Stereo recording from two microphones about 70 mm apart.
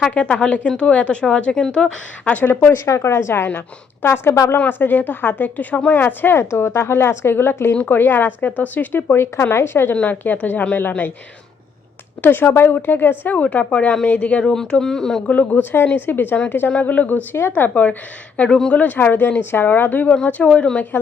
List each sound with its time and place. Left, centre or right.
0.1 s a woman's voice: centre
2.5 s speech: left
6.4 s speech: left
9.9 s speech: left
12.2 s a woman's voice: left; by 15.2 s centre
15.3 s speech: left
18.3 s a woman's voice: centre
18.8 s a woman's voice: left